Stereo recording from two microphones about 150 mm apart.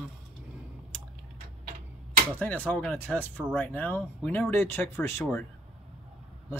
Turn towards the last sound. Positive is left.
turn(degrees=15)  # may be behind; listen again after turning